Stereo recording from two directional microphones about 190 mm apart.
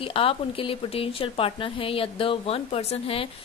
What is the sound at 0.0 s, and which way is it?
A woman's voice, 30° left (ahead or behind).